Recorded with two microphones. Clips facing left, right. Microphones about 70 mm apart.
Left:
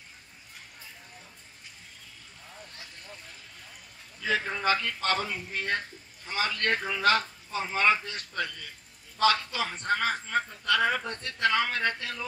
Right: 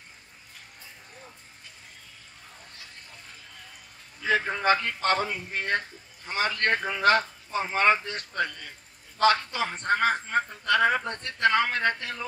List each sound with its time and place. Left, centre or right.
4.2 s a man's voice: right